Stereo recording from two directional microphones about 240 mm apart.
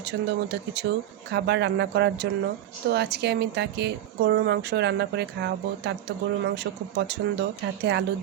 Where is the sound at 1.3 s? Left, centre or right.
Right.